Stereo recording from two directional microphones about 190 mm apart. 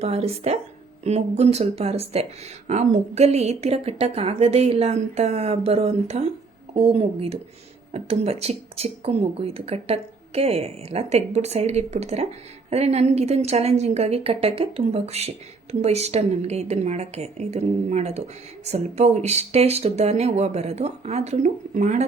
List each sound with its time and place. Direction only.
0.0 s speech: 35° right (ahead or behind)